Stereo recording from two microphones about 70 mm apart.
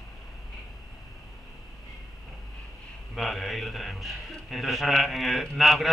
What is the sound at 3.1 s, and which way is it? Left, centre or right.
A man's voice, centre.